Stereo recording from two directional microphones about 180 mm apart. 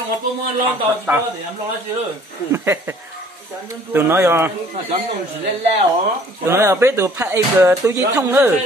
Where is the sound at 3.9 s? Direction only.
15° right (ahead or behind).